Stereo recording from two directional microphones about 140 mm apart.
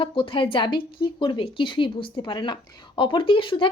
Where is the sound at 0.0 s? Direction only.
40° left (ahead or behind).